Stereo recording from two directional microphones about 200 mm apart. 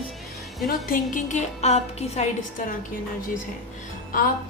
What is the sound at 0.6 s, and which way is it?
A woman's voice, 45° left (ahead or behind).